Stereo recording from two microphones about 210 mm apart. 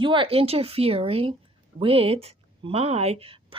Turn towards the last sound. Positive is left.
turn(degrees=-25)  # may be behind; listen again after turning